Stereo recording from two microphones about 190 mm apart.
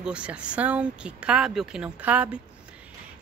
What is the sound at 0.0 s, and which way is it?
Speech, 5° right (ahead or behind).